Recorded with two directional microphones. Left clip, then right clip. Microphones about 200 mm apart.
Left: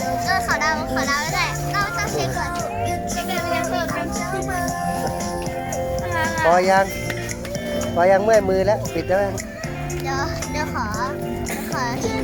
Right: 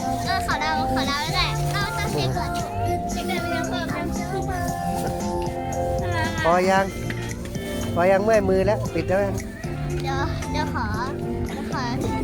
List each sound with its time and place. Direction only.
0.3 s music: 10° right (ahead or behind)
6.4 s speech: 10° right (ahead or behind)
7.9 s a child's voice: 5° right (ahead or behind)